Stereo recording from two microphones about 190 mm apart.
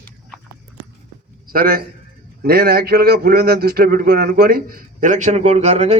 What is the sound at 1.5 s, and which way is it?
Speech, 50° right (ahead or behind).